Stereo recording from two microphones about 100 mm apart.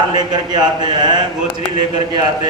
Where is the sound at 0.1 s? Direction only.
45° right (ahead or behind).